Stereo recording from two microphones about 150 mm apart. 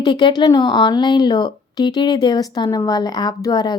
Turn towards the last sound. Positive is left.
turn(degrees=25)  # may be behind; listen again after turning